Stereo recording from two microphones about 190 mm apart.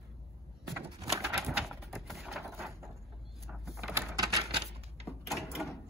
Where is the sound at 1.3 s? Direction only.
Centre (ahead or behind).